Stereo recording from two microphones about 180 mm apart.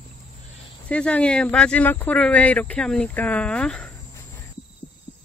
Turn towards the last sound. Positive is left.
turn(degrees=5)  # may be behind; listen again after turning